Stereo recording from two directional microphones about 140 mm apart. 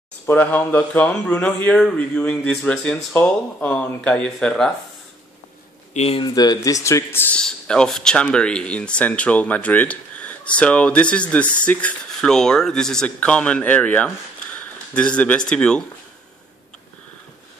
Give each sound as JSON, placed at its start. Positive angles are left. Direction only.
{"t": 0.3, "sound": "speech", "side_deg": 10}
{"t": 5.9, "sound": "speech", "side_deg": 45}
{"t": 6.2, "sound": "speech", "side_deg": 30}
{"t": 7.3, "sound": "speech", "side_deg": 5}